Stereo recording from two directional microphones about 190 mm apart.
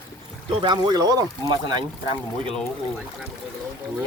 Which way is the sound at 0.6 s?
20° right (ahead or behind).